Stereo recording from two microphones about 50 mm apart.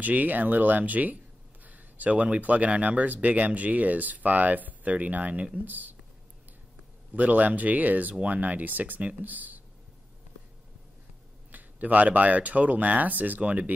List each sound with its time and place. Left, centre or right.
0.0 s speech: right
7.2 s speech: right
11.5 s speech: right